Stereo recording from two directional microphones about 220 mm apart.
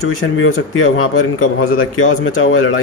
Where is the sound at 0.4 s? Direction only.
65° left (ahead or behind).